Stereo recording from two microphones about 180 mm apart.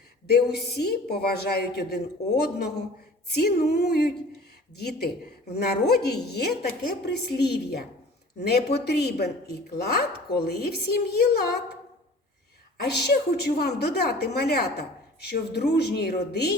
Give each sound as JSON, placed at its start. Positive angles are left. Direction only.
{"t": 0.3, "sound": "a woman's voice", "side_deg": 65}
{"t": 12.8, "sound": "a woman's voice", "side_deg": 70}